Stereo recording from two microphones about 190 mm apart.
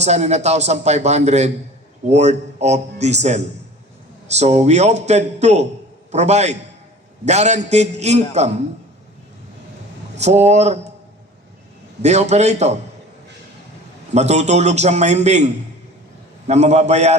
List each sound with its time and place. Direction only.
0.0 s a man's voice: 35° right (ahead or behind)
10.2 s a man's voice: 35° right (ahead or behind)
12.0 s a man's voice: 35° right (ahead or behind)
14.1 s a man's voice: 35° right (ahead or behind)
16.5 s a man's voice: 35° right (ahead or behind)